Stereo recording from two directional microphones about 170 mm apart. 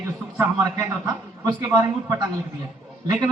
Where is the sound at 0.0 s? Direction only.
15° right (ahead or behind).